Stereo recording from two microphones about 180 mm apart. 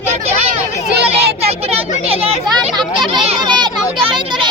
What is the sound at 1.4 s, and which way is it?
Children playing, 35° right (ahead or behind).